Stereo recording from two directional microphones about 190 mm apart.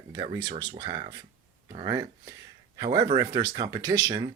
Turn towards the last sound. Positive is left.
turn(degrees=-20)  # may be behind; listen again after turning